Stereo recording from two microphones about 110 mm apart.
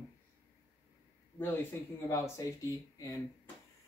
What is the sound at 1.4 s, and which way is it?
Speech, 20° left (ahead or behind).